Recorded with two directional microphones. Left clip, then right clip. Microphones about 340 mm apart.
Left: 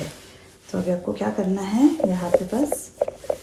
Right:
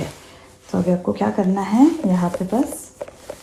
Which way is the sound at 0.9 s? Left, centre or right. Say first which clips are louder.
Right 4 dB; centre.